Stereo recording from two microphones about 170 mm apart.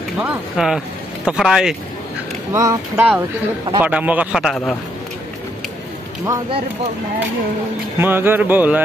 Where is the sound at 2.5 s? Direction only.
15° right (ahead or behind).